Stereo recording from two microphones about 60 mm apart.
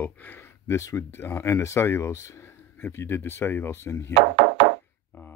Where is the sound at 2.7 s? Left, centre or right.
Left.